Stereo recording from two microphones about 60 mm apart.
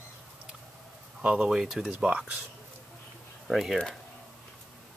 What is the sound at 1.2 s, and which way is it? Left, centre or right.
Speech, centre.